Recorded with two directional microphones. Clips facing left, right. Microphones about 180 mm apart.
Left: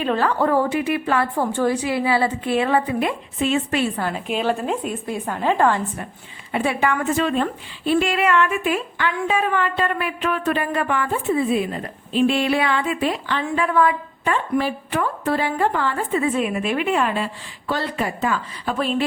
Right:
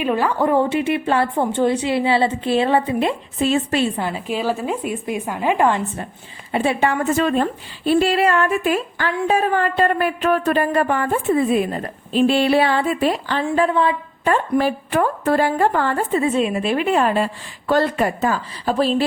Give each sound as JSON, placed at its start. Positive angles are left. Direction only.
{"t": 0.0, "sound": "a woman's voice", "side_deg": -10}
{"t": 3.9, "sound": "a woman's voice", "side_deg": -10}
{"t": 6.5, "sound": "a woman's voice", "side_deg": -30}
{"t": 7.2, "sound": "a woman's voice", "side_deg": -45}
{"t": 7.9, "sound": "a sound", "side_deg": -35}
{"t": 14.3, "sound": "a woman's voice", "side_deg": -45}
{"t": 16.2, "sound": "a sound", "side_deg": -25}